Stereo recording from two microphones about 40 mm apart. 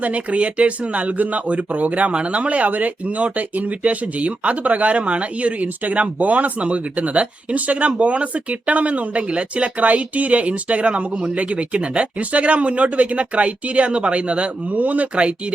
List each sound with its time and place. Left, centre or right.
0.0 s speech: right